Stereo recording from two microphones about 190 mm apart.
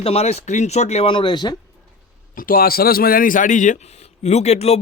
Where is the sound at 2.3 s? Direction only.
50° left (ahead or behind).